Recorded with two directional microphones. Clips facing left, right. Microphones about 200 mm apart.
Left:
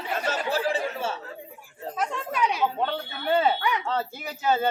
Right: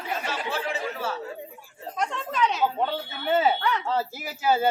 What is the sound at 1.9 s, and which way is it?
Speech, 5° left (ahead or behind).